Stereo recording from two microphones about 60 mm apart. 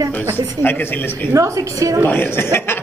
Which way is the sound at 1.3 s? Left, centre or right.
Right.